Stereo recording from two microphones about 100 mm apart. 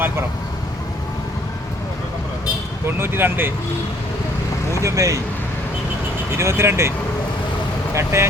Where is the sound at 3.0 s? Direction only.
20° right (ahead or behind).